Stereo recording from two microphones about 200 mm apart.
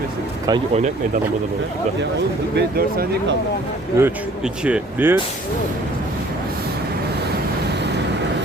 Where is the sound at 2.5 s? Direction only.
50° right (ahead or behind).